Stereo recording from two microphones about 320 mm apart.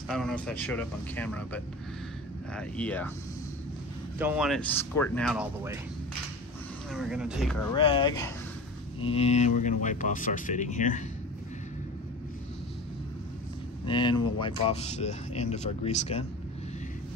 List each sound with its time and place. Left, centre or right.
0.1 s speech: centre
4.2 s speech: centre
6.9 s speech: centre
7.7 s speech: centre
13.8 s speech: centre